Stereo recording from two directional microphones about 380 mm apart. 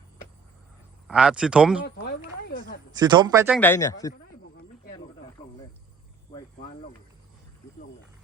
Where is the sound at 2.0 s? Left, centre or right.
Left.